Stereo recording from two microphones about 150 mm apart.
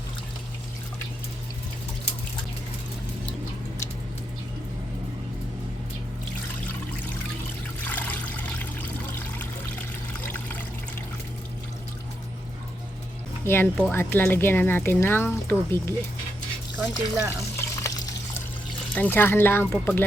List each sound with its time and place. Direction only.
7.9 s trickle: 10° left (ahead or behind)
10.2 s water: 15° left (ahead or behind)
13.4 s speech: 15° left (ahead or behind)
16.7 s speech: 15° right (ahead or behind)
18.9 s speech: 10° left (ahead or behind)